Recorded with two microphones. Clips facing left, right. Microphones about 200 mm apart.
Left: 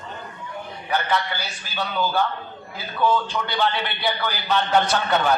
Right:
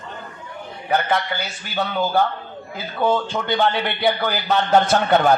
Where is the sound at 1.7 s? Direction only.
50° right (ahead or behind).